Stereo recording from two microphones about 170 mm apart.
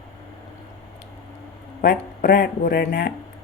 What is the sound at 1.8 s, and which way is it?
Speech, 60° left (ahead or behind).